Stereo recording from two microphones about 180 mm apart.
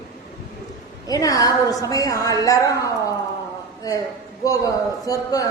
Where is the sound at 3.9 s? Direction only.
20° left (ahead or behind).